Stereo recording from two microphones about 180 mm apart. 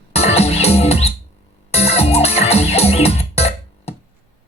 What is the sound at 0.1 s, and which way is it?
Music, 35° left (ahead or behind).